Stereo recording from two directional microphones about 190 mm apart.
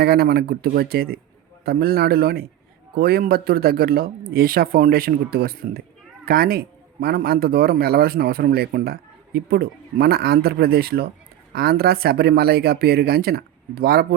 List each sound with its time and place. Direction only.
0.0 s speech: 55° right (ahead or behind)